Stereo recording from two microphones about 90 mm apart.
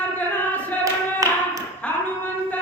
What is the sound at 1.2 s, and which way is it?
Tap, 40° right (ahead or behind).